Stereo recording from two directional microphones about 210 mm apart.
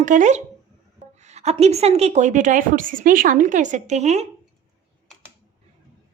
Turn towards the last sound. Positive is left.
turn(degrees=-30)  # may be behind; listen again after turning